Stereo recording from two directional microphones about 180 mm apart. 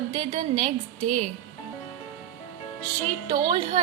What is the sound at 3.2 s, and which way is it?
Speech, 25° right (ahead or behind).